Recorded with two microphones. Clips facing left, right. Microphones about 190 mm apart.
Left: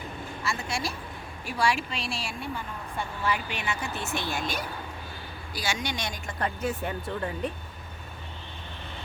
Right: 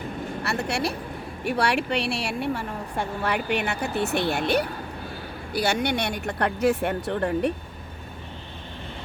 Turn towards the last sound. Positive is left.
turn(degrees=-65)  # may be behind; listen again after turning